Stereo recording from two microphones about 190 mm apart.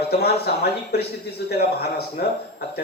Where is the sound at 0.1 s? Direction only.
55° left (ahead or behind).